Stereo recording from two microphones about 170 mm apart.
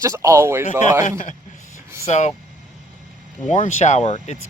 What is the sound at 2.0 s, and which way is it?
Speech, 40° left (ahead or behind).